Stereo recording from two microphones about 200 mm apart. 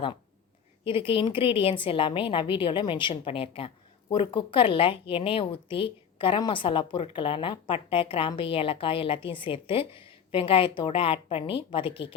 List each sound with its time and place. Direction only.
0.9 s a woman's voice: 25° left (ahead or behind)